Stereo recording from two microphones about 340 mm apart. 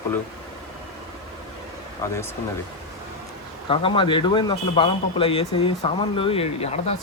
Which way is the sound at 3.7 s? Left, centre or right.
Centre.